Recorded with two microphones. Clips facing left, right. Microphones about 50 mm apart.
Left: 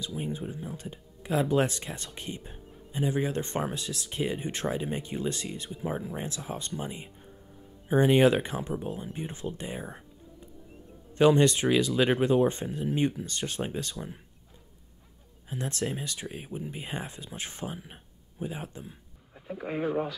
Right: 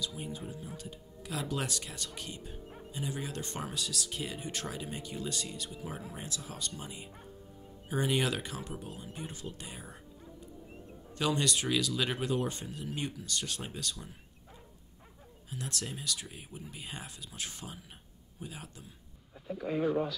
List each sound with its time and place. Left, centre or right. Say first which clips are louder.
0.0 s speech: left 5 dB; left
11.1 s speech: left 10 dB; left
15.5 s speech: left 8 dB; left